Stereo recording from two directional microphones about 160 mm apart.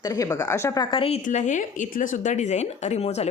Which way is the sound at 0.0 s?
20° left (ahead or behind).